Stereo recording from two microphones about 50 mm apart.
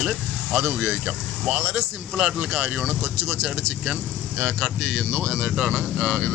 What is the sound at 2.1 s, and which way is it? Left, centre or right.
Speech, right.